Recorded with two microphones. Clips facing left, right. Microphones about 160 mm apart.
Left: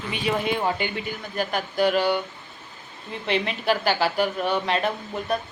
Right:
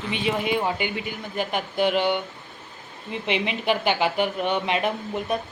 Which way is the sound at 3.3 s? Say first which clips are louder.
Left 1 dB; 15° right (ahead or behind).